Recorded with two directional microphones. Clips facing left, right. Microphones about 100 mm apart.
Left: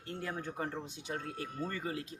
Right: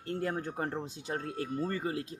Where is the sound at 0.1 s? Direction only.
40° right (ahead or behind).